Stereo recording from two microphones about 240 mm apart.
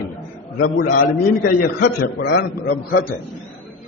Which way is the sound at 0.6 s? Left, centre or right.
Left.